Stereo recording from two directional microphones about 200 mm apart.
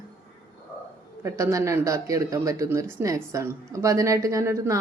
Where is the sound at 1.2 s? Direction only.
15° right (ahead or behind).